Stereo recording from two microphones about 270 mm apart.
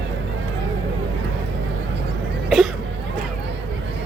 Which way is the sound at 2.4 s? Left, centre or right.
Centre.